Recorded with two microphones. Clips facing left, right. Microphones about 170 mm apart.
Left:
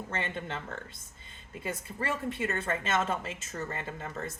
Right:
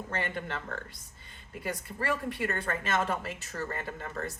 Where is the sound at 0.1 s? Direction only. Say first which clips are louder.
Right 1 dB; 25° left (ahead or behind).